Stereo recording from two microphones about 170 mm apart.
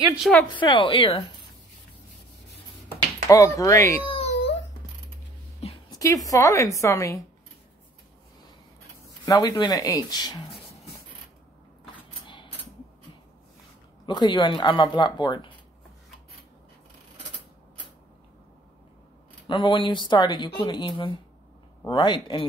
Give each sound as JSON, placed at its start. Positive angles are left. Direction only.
{"t": 0.2, "sound": "speech", "side_deg": 5}
{"t": 0.5, "sound": "speech", "side_deg": 30}
{"t": 3.3, "sound": "speech", "side_deg": 20}
{"t": 4.0, "sound": "baby cry", "side_deg": 35}
{"t": 5.9, "sound": "speech", "side_deg": 20}
{"t": 9.2, "sound": "speech", "side_deg": 20}
{"t": 11.9, "sound": "mechanisms", "side_deg": 30}
{"t": 14.0, "sound": "speech", "side_deg": 25}
{"t": 19.4, "sound": "speech", "side_deg": 30}